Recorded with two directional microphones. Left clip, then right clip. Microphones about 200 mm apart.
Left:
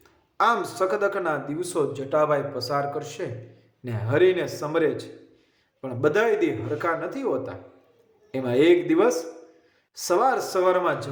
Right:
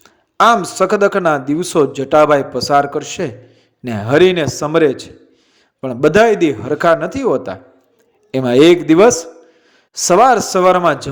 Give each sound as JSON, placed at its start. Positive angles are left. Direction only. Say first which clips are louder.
{"t": 0.0, "sound": "a man's voice", "louder": "right 11 dB", "side_deg": -40}